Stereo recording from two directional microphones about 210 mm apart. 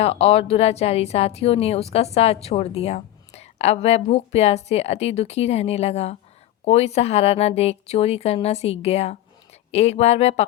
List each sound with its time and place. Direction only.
0.0 s a woman's voice: 30° left (ahead or behind)